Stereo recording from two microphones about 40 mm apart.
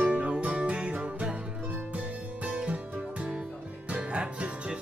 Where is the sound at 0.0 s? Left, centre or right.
Right.